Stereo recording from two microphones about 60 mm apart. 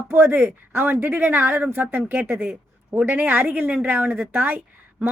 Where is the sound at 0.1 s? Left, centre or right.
Right.